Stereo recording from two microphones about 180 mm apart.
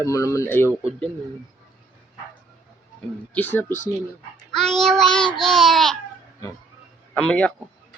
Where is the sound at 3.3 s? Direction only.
10° left (ahead or behind).